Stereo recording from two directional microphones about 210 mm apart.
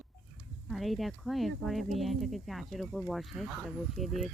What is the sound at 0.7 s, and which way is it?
Speech, centre (ahead or behind).